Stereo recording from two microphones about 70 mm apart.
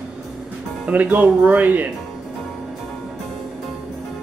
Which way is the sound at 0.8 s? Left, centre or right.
Right.